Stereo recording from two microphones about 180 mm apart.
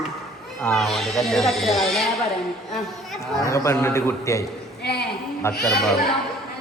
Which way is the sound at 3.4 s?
15° left (ahead or behind).